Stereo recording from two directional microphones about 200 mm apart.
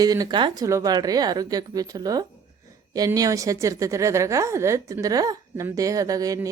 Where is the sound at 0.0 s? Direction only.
20° right (ahead or behind).